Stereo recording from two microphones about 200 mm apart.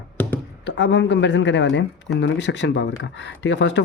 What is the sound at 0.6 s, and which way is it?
Speech, 60° left (ahead or behind).